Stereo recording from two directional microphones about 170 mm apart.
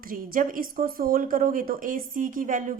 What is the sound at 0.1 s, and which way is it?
A woman's voice, 55° right (ahead or behind).